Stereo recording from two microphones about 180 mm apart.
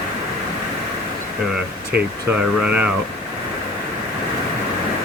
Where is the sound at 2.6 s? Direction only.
10° right (ahead or behind).